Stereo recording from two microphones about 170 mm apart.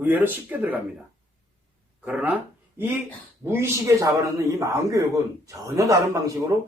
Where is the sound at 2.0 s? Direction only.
10° right (ahead or behind).